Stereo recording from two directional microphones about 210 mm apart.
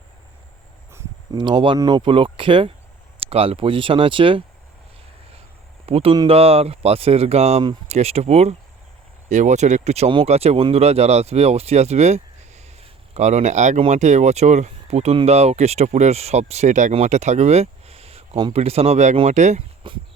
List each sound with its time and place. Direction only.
0.9 s speech: 20° right (ahead or behind)
5.8 s speech: 25° right (ahead or behind)